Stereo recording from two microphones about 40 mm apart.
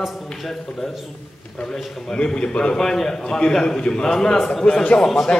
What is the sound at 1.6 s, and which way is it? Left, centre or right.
A man's voice, left.